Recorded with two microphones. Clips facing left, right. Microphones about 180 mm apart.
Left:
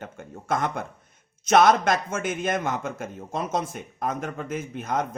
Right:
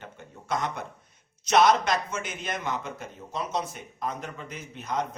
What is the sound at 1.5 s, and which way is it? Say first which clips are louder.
A man's voice: left 3 dB; 50° left (ahead or behind).